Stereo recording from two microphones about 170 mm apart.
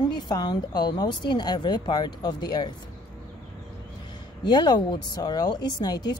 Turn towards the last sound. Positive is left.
turn(degrees=25)  # may be behind; listen again after turning